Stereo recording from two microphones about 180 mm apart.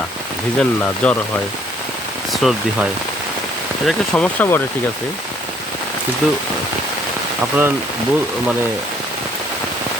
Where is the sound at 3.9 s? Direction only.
5° left (ahead or behind).